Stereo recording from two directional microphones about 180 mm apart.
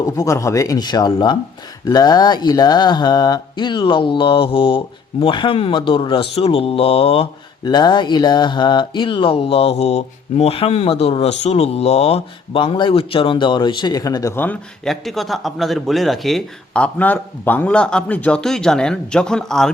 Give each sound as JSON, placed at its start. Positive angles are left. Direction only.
{"t": 0.0, "sound": "speech", "side_deg": 15}